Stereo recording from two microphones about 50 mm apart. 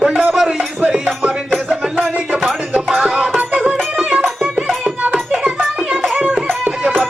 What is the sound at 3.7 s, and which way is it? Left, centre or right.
Music, centre.